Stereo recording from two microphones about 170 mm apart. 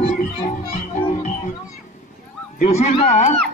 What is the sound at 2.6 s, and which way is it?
Speech, 40° left (ahead or behind).